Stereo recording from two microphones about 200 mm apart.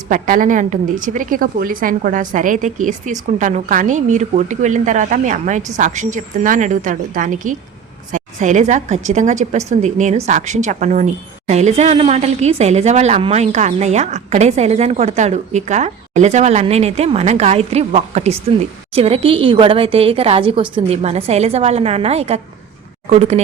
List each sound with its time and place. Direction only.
0.1 s a woman's voice: 40° right (ahead or behind)